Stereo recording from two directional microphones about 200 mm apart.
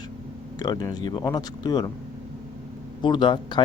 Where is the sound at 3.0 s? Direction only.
25° left (ahead or behind).